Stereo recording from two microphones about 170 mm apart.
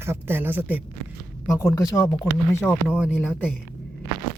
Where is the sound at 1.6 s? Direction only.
15° left (ahead or behind).